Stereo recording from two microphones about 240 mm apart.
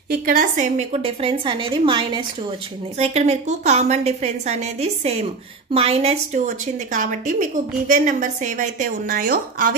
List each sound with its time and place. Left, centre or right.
0.1 s a woman's voice: right